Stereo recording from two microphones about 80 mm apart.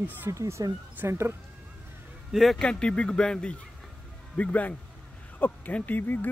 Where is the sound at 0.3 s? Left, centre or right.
Right.